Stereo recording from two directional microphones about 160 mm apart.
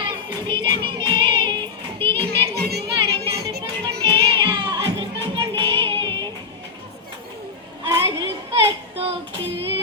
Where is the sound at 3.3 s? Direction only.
90° right.